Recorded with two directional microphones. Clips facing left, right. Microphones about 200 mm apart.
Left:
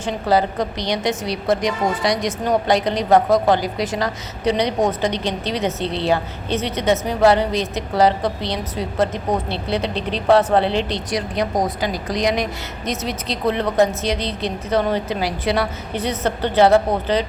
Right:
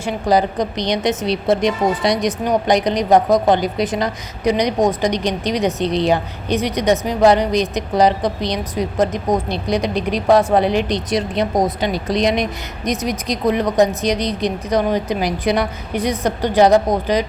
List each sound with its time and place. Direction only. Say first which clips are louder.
0.0 s a woman's voice: right 2 dB; 15° right (ahead or behind)